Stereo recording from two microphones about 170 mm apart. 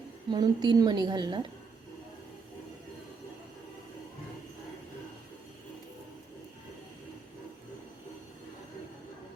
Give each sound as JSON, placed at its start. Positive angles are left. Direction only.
{"t": 0.3, "sound": "a woman's voice", "side_deg": -25}